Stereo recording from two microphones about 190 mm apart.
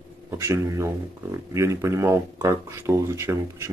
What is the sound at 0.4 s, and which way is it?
Speech, 15° right (ahead or behind).